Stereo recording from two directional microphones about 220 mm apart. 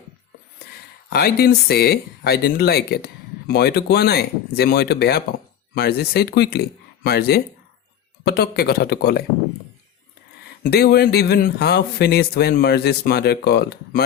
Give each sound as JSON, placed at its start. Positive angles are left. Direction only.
{"t": 1.1, "sound": "speech", "side_deg": 45}
{"t": 10.6, "sound": "speech", "side_deg": 45}